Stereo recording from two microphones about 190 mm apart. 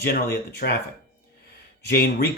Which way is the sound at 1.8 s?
55° left (ahead or behind).